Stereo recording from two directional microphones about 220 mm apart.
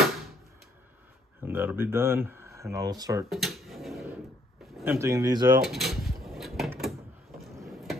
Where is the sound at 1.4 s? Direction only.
10° right (ahead or behind).